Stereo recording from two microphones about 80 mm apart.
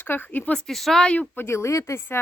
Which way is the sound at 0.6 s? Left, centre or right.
Centre.